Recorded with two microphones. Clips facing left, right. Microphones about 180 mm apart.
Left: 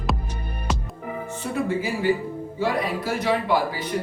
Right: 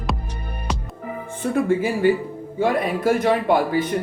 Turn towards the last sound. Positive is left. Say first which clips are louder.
# right 5 dB
turn(degrees=-50)  # may be behind; listen again after turning